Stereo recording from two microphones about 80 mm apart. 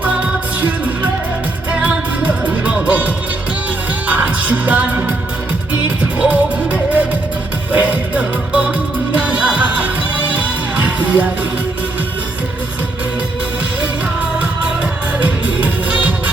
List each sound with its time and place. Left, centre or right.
0.0 s music: centre
15.2 s music: centre